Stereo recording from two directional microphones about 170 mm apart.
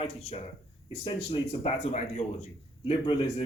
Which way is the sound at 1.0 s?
35° left (ahead or behind).